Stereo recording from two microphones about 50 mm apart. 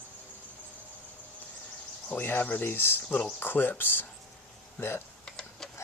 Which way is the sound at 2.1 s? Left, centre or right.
Left.